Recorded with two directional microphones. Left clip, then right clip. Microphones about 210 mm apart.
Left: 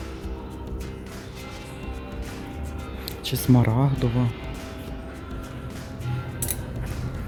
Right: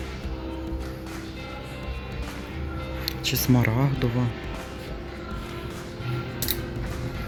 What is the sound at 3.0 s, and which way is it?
Speech, 10° left (ahead or behind).